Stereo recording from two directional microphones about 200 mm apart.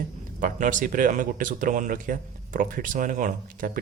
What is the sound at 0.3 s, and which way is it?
Speech, 40° right (ahead or behind).